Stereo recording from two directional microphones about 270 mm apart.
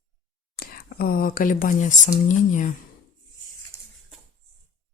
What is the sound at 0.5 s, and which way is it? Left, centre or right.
Speech, left.